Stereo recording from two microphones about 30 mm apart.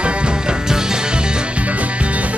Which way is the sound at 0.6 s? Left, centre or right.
Right.